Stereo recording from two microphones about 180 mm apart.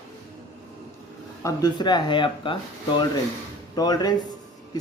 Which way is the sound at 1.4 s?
20° left (ahead or behind).